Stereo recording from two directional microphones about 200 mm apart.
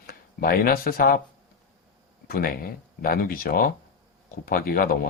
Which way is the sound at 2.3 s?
45° left (ahead or behind).